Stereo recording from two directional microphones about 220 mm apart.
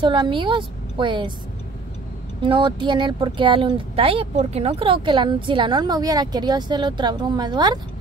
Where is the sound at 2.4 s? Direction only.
20° right (ahead or behind).